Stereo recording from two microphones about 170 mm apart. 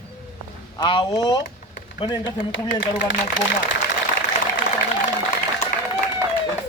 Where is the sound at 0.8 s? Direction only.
30° left (ahead or behind).